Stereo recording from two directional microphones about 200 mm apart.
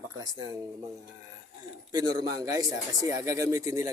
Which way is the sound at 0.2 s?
20° right (ahead or behind).